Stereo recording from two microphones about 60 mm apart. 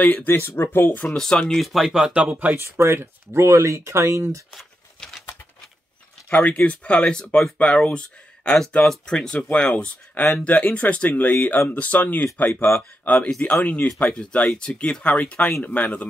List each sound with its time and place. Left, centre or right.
0.0 s speech: left
0.3 s speech: left
1.0 s speech: centre
1.6 s speech: centre
2.1 s speech: right
2.5 s speech: right
4.6 s a sound: centre
6.3 s speech: left
10.4 s speech: left